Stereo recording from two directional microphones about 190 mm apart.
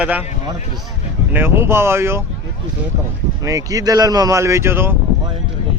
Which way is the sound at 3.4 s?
20° right (ahead or behind).